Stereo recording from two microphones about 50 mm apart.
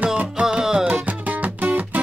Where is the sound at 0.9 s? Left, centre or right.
Right.